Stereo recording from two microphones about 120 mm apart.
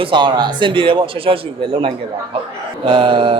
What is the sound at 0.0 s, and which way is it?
Speech, 40° right (ahead or behind).